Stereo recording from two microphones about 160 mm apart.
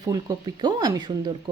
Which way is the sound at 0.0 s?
25° right (ahead or behind).